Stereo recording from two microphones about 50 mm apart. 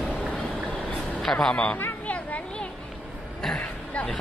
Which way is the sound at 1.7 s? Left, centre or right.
Left.